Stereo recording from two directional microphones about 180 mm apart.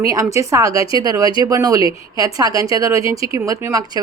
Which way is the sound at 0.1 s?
20° right (ahead or behind).